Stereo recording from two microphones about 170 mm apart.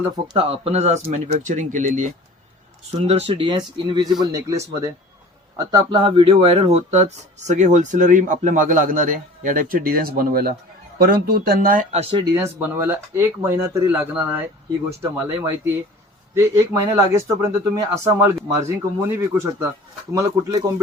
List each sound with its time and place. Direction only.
0.3 s speech: 35° right (ahead or behind)
3.1 s speech: 35° right (ahead or behind)
12.3 s speech: 15° right (ahead or behind)